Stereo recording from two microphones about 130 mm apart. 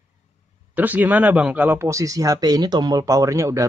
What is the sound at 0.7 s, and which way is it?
Speech, 15° right (ahead or behind).